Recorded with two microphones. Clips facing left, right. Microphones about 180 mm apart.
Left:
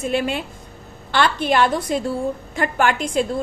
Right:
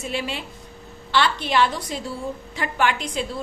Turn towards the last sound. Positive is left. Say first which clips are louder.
# left 4 dB
turn(degrees=50)  # may be behind; listen again after turning